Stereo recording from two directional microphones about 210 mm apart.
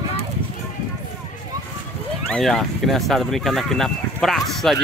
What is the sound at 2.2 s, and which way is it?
Speech, 5° left (ahead or behind).